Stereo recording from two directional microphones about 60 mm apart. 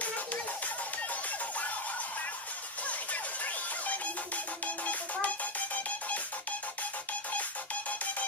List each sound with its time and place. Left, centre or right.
2.9 s music: left